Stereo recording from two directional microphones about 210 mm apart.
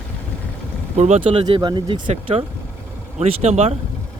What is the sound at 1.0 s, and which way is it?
Speech, 30° right (ahead or behind).